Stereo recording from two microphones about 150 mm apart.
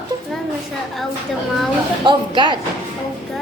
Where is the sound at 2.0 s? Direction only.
30° right (ahead or behind).